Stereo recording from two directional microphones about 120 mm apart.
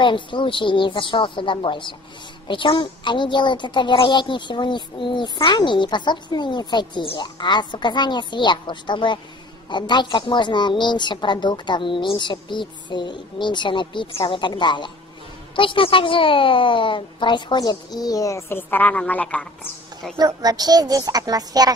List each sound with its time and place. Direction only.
0.0 s a woman's voice: 45° left (ahead or behind); by 20.2 s 5° left (ahead or behind)
20.2 s speech: 35° right (ahead or behind)